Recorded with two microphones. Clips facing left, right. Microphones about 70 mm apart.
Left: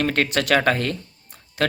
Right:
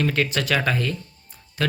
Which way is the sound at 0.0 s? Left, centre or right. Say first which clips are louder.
Left 2 dB; left.